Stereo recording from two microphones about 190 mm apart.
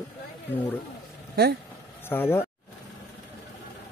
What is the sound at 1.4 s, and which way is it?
Speech, 60° right (ahead or behind).